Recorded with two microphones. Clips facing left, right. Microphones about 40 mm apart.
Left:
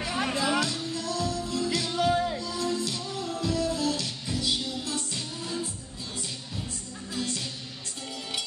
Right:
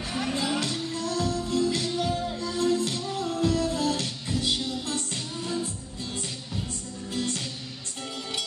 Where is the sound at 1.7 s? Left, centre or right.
Left.